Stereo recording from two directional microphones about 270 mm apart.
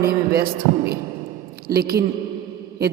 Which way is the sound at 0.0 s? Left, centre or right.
Right.